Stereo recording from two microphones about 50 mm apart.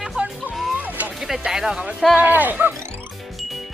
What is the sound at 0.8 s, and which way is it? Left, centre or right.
Music, right.